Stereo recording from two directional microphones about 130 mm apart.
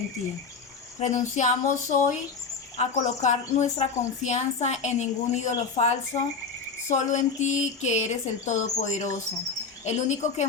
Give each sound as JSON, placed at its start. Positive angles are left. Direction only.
{"t": 0.9, "sound": "speech", "side_deg": 60}